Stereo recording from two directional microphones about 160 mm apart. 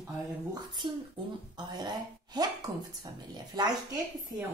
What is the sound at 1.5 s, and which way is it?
A woman's voice, 25° right (ahead or behind).